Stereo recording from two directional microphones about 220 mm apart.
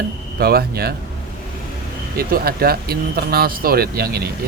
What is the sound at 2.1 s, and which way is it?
Speech, 45° right (ahead or behind).